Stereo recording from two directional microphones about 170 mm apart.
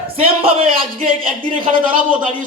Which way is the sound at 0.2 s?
35° right (ahead or behind).